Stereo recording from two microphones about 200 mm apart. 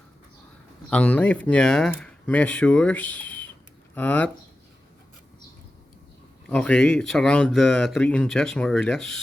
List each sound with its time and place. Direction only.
0.9 s speech: 5° left (ahead or behind)
6.5 s speech: 5° left (ahead or behind)